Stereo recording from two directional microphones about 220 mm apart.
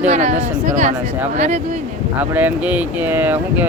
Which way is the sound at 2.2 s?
5° right (ahead or behind).